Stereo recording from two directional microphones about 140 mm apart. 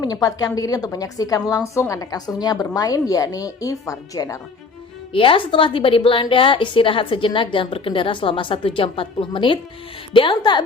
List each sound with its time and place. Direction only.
0.0 s a woman's voice: 25° left (ahead or behind)
5.1 s a woman's voice: 40° left (ahead or behind)